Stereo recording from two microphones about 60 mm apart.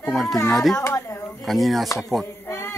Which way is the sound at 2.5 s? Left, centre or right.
Left.